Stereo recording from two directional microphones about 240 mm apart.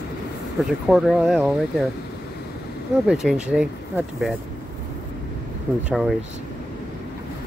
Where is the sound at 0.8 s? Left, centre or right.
Centre.